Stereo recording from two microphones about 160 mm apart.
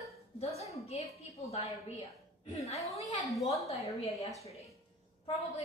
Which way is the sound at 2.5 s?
40° left (ahead or behind).